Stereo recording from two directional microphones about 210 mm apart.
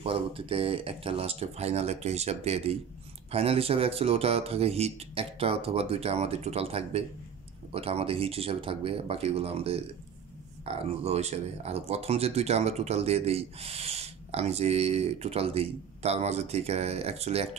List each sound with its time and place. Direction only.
0.0 s speech: 25° right (ahead or behind)